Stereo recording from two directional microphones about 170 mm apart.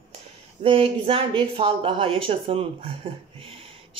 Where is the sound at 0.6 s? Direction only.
35° right (ahead or behind).